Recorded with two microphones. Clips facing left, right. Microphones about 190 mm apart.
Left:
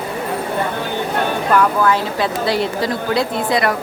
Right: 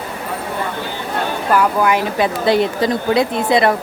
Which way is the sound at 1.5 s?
10° right (ahead or behind).